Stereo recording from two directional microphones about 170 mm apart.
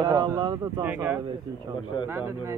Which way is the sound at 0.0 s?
20° right (ahead or behind).